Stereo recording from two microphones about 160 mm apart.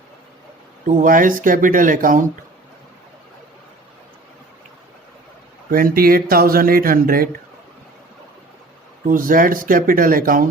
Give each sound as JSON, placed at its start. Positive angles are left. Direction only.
{"t": 0.9, "sound": "speech", "side_deg": -55}
{"t": 5.7, "sound": "speech", "side_deg": -65}
{"t": 9.0, "sound": "speech", "side_deg": -60}